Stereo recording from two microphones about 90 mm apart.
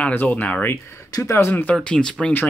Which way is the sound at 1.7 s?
5° left (ahead or behind).